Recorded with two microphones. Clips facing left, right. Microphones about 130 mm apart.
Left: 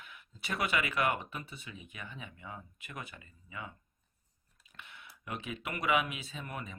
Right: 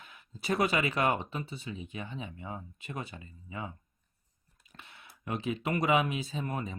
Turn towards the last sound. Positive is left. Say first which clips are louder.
# right 7 dB
turn(degrees=-35)  # may be behind; listen again after turning